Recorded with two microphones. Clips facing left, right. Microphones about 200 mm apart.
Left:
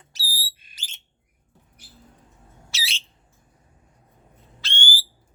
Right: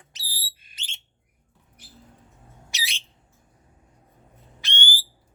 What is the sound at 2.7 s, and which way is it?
Bird, 15° right (ahead or behind).